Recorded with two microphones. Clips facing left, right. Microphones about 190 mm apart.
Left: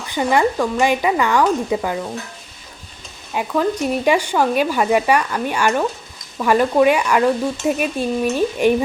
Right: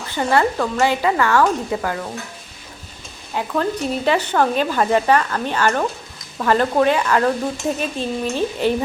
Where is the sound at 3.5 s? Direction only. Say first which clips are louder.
Left 3 dB; 10° left (ahead or behind).